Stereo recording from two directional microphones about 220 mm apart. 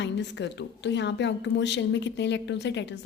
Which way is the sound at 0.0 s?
50° left (ahead or behind).